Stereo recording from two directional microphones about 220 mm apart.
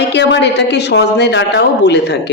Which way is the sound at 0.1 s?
50° left (ahead or behind).